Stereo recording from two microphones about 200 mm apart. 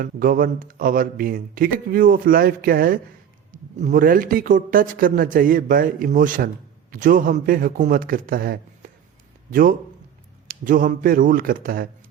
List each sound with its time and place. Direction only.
0.0 s a man's voice: 45° right (ahead or behind)